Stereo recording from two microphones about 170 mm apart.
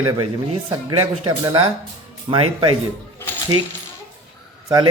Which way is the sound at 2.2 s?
30° right (ahead or behind).